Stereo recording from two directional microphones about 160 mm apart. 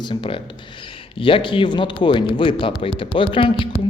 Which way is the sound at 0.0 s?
30° left (ahead or behind).